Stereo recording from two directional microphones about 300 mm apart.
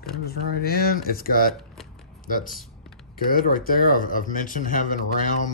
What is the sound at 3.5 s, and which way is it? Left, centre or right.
Speech, left.